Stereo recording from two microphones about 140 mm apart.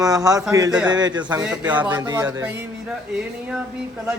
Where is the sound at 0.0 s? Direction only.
25° right (ahead or behind).